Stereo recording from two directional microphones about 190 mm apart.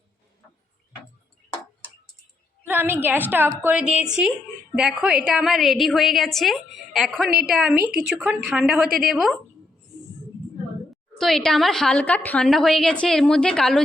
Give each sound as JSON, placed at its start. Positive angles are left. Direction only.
{"t": 2.6, "sound": "a woman's voice", "side_deg": -10}
{"t": 7.3, "sound": "a woman's voice", "side_deg": -55}
{"t": 7.5, "sound": "a woman's voice", "side_deg": 0}
{"t": 7.9, "sound": "speech", "side_deg": -55}
{"t": 8.4, "sound": "a woman's voice", "side_deg": -5}
{"t": 11.2, "sound": "a woman's voice", "side_deg": 0}